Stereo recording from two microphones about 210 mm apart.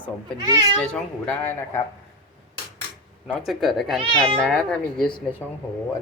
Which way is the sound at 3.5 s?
Centre (ahead or behind).